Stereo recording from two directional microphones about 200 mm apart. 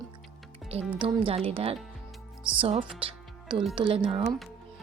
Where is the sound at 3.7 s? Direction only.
25° right (ahead or behind).